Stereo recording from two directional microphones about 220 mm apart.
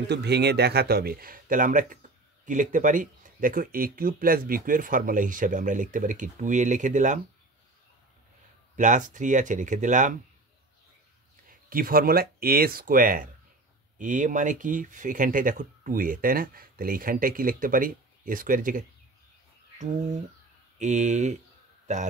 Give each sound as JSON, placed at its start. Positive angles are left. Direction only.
{"t": 0.1, "sound": "speech", "side_deg": -50}
{"t": 8.7, "sound": "speech", "side_deg": -35}
{"t": 11.7, "sound": "speech", "side_deg": -40}
{"t": 20.8, "sound": "speech", "side_deg": -35}